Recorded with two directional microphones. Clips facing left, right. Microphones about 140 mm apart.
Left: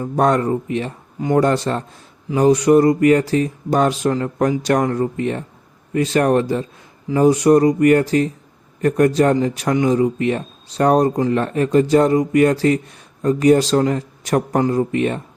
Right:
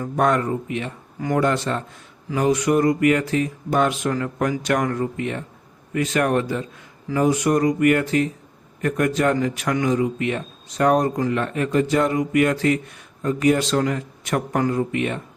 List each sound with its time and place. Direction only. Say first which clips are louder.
0.0 s speech: left 3 dB; 35° left (ahead or behind)